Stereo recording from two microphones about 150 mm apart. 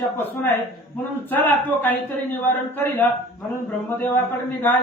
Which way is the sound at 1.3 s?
10° left (ahead or behind).